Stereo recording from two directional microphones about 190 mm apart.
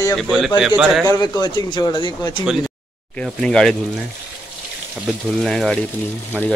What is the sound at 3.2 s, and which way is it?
Speech, 5° left (ahead or behind).